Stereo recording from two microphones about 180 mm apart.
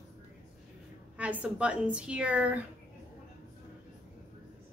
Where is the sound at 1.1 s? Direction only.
10° right (ahead or behind).